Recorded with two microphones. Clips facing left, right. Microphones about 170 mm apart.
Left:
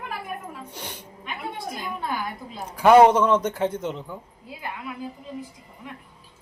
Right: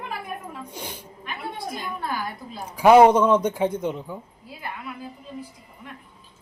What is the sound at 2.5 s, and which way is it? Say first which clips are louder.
A man's voice: right 1 dB; 10° right (ahead or behind).